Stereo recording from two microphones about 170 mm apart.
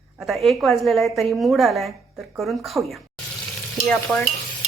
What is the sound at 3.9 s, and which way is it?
Stir, 10° left (ahead or behind).